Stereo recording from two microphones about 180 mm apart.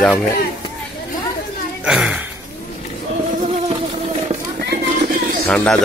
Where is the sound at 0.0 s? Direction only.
Centre (ahead or behind).